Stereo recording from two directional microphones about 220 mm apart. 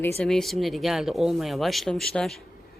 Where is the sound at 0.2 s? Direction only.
Centre (ahead or behind).